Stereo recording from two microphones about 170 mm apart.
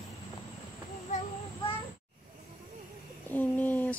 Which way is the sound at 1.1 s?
45° left (ahead or behind).